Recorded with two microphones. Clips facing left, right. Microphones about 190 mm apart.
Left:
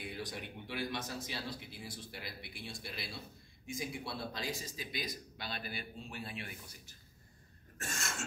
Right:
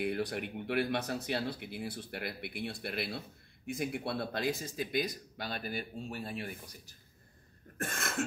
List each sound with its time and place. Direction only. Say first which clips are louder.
0.0 s speech: right 9 dB; 60° right (ahead or behind); by 7.0 s 40° right (ahead or behind)
7.8 s speech: right 6 dB; 55° right (ahead or behind)